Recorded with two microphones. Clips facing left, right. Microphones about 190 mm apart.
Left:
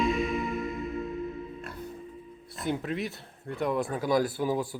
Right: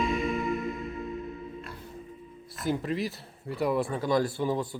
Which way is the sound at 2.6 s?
Centre (ahead or behind).